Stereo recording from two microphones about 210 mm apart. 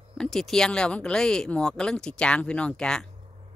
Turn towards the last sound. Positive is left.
turn(degrees=5)  # may be behind; listen again after turning